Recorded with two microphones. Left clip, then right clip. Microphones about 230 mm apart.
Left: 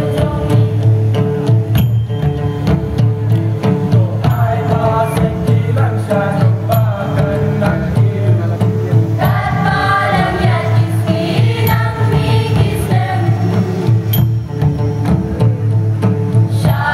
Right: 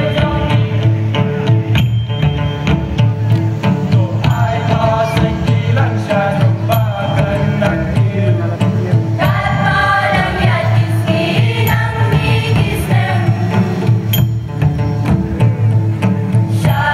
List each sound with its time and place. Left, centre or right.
0.1 s music: left
3.6 s music: left
6.7 s music: left
9.2 s music: left